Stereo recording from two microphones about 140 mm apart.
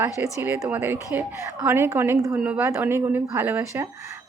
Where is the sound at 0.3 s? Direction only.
20° right (ahead or behind).